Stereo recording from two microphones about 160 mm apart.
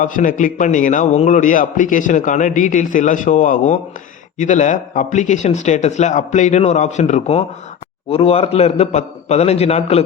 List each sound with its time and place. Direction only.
0.0 s a man's voice: 55° left (ahead or behind); by 10.0 s 40° left (ahead or behind)